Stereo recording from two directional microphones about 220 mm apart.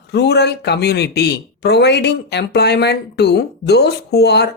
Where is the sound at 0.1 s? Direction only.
50° left (ahead or behind).